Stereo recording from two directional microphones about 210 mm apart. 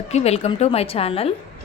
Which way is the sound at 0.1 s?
30° left (ahead or behind).